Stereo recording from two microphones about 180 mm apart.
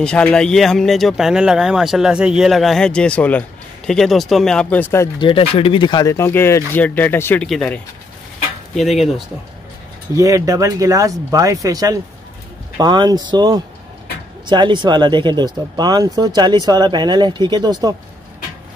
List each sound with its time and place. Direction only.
0.0 s speech: 5° left (ahead or behind)
5.2 s speech: 30° left (ahead or behind); by 7.8 s 5° left (ahead or behind)
10.1 s speech: 20° right (ahead or behind)